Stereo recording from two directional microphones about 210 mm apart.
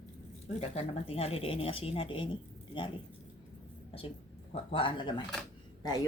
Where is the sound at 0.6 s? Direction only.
30° left (ahead or behind).